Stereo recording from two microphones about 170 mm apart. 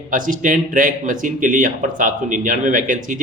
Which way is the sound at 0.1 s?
50° right (ahead or behind).